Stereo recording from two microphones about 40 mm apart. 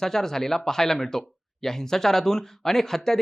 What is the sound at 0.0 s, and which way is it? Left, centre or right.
Speech, centre.